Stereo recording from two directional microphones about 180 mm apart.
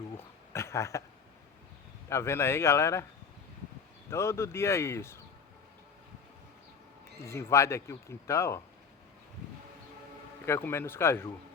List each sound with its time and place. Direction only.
0.5 s speech: 15° left (ahead or behind)
2.0 s speech: 15° left (ahead or behind)
4.1 s speech: 15° left (ahead or behind)
7.3 s speech: 15° left (ahead or behind)
10.4 s speech: 15° left (ahead or behind)